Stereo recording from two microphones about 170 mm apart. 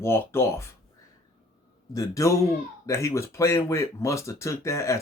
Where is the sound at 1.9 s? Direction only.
20° left (ahead or behind).